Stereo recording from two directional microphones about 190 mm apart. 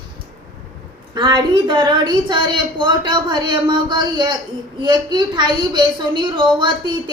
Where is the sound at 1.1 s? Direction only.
25° right (ahead or behind).